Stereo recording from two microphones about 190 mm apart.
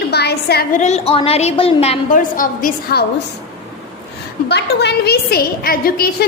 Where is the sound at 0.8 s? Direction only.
35° left (ahead or behind); by 3.0 s 50° left (ahead or behind).